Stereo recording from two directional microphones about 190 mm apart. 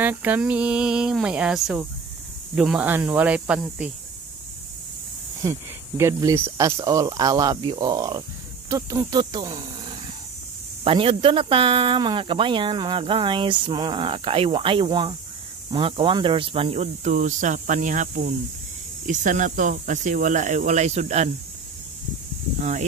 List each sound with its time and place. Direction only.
0.0 s speech: 10° right (ahead or behind)
5.4 s speech: 15° right (ahead or behind); by 21.3 s 35° right (ahead or behind)
22.6 s speech: 40° right (ahead or behind)